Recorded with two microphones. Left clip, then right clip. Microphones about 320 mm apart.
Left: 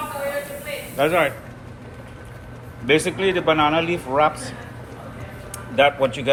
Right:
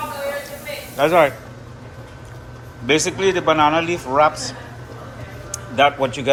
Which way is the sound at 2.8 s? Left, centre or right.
Centre.